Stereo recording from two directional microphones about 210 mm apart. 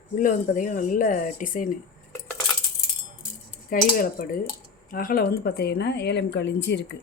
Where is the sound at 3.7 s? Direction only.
40° left (ahead or behind).